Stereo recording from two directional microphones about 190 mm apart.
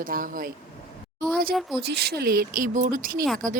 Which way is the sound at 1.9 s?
55° right (ahead or behind).